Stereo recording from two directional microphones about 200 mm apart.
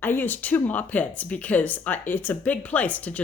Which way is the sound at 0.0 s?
10° left (ahead or behind).